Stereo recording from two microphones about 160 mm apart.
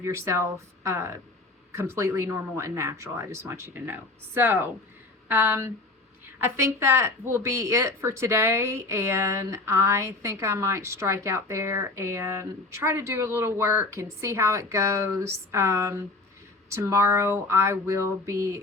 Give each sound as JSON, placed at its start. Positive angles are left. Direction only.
{"t": 0.0, "sound": "a woman's voice", "side_deg": -15}